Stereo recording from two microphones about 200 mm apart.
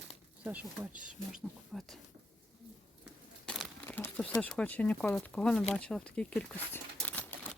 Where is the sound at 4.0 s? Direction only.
10° left (ahead or behind).